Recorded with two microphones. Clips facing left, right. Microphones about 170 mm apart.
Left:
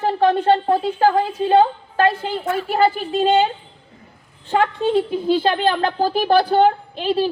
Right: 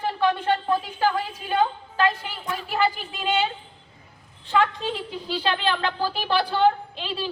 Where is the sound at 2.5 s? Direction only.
45° left (ahead or behind).